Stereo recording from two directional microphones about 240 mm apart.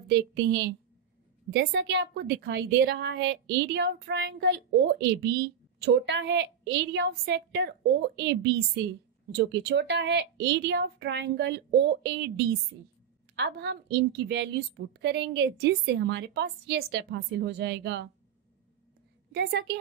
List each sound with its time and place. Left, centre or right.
0.1 s a woman's voice: right
13.4 s a woman's voice: right
19.3 s a woman's voice: right